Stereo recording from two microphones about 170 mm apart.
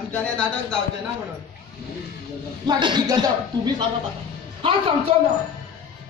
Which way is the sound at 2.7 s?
25° right (ahead or behind).